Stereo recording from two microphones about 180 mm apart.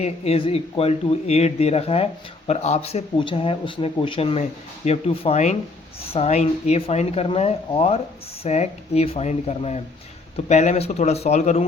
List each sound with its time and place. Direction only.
0.0 s speech: 30° left (ahead or behind)